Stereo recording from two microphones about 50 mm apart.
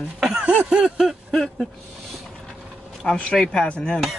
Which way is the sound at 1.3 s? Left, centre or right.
Centre.